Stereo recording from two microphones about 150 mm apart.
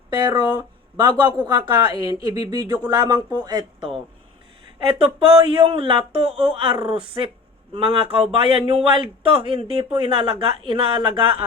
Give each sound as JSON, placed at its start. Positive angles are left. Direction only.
{"t": 0.1, "sound": "speech", "side_deg": -30}